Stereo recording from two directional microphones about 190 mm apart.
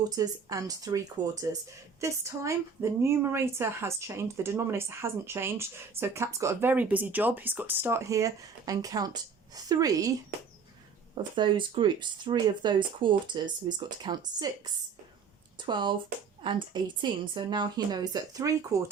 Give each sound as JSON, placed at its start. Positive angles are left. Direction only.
{"t": 0.2, "sound": "a woman's voice", "side_deg": -20}
{"t": 11.3, "sound": "speech", "side_deg": -25}
{"t": 15.6, "sound": "speech", "side_deg": -25}